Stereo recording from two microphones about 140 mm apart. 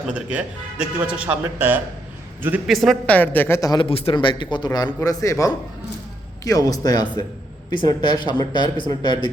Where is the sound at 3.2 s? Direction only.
15° left (ahead or behind).